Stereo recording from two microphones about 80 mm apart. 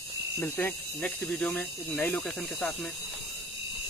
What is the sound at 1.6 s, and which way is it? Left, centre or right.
Speech, left.